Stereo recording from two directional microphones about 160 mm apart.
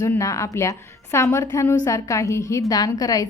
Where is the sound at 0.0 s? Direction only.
20° left (ahead or behind).